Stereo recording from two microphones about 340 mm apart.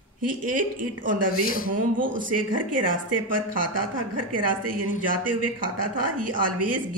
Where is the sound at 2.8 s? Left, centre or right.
Right.